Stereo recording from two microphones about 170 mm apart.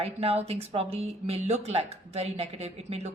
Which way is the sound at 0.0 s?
35° right (ahead or behind).